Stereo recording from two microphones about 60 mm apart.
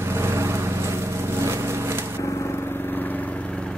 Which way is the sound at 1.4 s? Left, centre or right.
Right.